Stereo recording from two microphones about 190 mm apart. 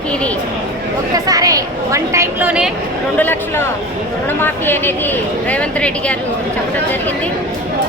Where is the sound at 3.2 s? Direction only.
10° left (ahead or behind).